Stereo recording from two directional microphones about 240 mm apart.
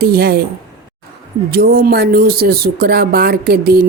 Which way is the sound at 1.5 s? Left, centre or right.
Right.